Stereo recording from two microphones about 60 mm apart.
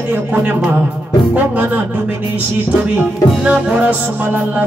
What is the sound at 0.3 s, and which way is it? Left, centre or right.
Music, right.